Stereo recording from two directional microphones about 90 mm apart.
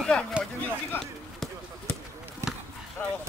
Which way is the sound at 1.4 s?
5° left (ahead or behind).